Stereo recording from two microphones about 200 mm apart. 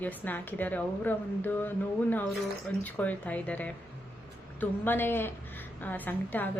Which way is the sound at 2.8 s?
10° left (ahead or behind).